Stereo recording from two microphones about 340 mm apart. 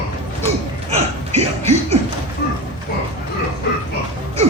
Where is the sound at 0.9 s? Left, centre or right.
Centre.